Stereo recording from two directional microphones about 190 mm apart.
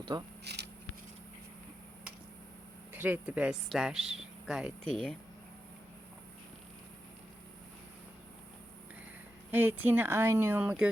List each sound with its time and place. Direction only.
0.0 s speech: 20° right (ahead or behind)
0.4 s a sound: 60° right (ahead or behind)
2.9 s speech: 10° right (ahead or behind)
9.5 s speech: 10° right (ahead or behind)